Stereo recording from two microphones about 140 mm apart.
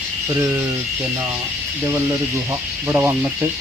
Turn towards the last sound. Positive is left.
turn(degrees=-20)  # may be behind; listen again after turning